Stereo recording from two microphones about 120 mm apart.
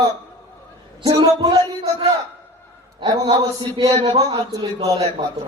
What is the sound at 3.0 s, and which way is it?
A man's voice, 35° right (ahead or behind).